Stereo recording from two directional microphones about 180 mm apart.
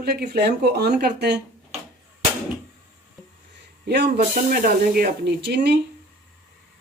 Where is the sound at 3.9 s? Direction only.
65° right (ahead or behind).